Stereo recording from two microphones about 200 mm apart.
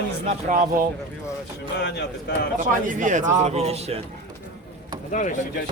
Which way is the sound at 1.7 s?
55° left (ahead or behind).